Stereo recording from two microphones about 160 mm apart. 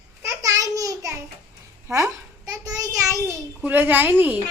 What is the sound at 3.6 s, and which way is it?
Speech, 10° right (ahead or behind).